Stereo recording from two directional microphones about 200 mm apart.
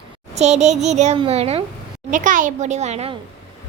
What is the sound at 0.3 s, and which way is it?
A child's voice, 35° right (ahead or behind).